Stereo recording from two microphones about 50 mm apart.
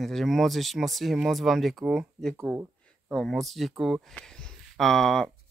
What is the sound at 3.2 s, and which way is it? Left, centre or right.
Speech, centre.